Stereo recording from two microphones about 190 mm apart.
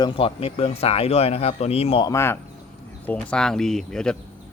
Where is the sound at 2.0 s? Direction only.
15° left (ahead or behind).